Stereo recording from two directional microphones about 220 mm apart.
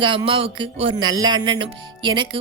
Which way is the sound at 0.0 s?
20° right (ahead or behind).